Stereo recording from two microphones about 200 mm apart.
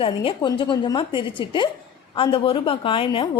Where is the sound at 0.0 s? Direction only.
25° left (ahead or behind).